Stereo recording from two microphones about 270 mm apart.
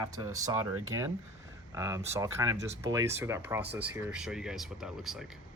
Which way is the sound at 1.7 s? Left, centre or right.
Centre.